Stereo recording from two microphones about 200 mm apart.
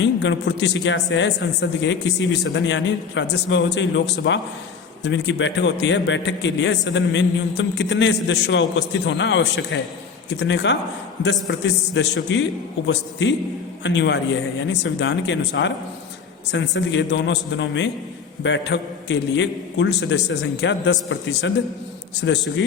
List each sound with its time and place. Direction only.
0.0 s a man's voice: 65° left (ahead or behind)